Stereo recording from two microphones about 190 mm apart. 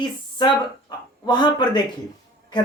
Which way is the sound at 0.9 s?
20° left (ahead or behind).